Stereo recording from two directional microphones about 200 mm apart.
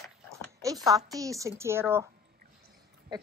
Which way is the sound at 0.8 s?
15° right (ahead or behind).